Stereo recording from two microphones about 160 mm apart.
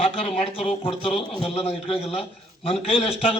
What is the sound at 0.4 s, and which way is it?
A man's voice, 35° left (ahead or behind).